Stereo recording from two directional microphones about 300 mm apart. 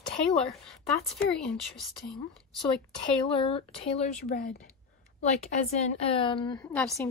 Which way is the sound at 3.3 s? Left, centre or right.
Centre.